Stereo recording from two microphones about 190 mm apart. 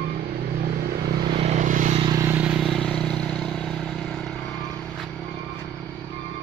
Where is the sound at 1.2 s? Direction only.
30° right (ahead or behind).